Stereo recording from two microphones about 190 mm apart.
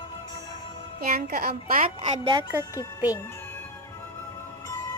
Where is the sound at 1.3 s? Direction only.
50° right (ahead or behind).